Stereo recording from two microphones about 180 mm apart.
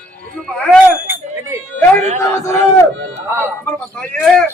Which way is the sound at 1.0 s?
10° right (ahead or behind).